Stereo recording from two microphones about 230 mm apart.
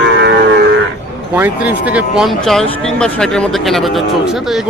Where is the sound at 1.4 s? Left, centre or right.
Centre.